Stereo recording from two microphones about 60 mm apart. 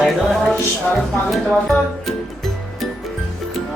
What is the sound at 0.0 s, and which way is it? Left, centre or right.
Music, centre.